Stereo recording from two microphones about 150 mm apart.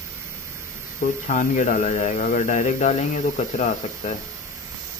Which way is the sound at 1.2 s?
55° left (ahead or behind).